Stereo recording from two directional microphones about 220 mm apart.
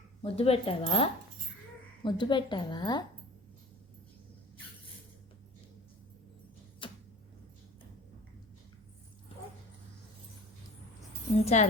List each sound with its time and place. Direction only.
0.2 s a woman's voice: 25° left (ahead or behind)
2.0 s a woman's voice: 20° left (ahead or behind)
6.8 s a sound: 20° left (ahead or behind)
11.4 s speech: 30° left (ahead or behind)